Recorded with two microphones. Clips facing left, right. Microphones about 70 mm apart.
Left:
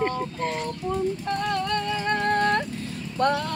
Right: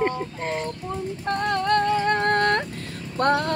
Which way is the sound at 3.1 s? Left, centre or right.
Right.